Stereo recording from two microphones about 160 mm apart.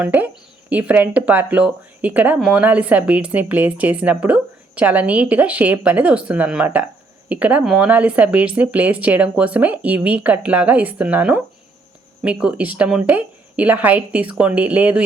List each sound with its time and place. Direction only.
0.0 s speech: 10° right (ahead or behind)